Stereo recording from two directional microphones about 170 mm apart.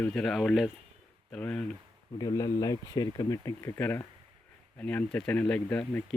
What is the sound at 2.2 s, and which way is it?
Speech, 20° left (ahead or behind).